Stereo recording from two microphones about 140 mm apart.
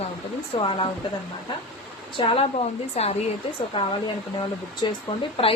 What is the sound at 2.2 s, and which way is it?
Speech, 45° left (ahead or behind).